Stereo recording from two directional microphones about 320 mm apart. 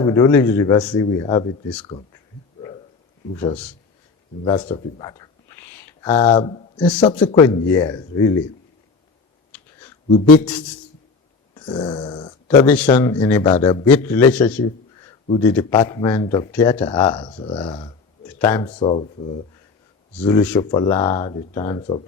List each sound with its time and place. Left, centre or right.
0.0 s speech: centre
3.3 s speech: centre
11.5 s speech: centre